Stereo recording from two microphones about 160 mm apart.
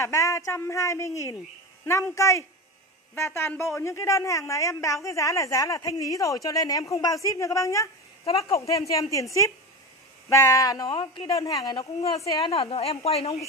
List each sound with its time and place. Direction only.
0.0 s a woman's voice: 20° left (ahead or behind)
12.4 s a woman's voice: 35° left (ahead or behind)